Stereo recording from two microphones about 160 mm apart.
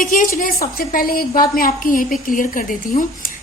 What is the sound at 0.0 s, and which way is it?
A woman's voice, 60° left (ahead or behind).